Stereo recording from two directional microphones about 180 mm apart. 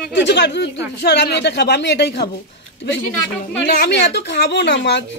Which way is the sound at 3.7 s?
65° left (ahead or behind).